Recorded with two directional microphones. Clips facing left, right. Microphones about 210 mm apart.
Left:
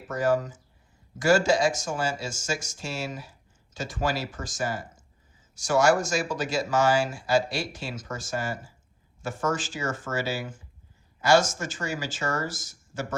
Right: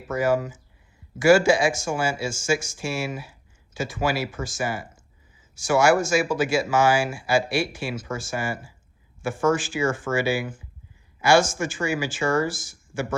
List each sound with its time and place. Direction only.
0.1 s speech: 5° right (ahead or behind)